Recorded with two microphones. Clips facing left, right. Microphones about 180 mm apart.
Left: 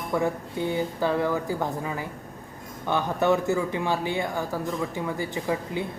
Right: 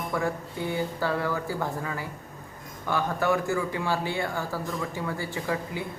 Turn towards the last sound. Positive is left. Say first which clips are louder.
# left 3 dB
turn(degrees=20)  # may be behind; listen again after turning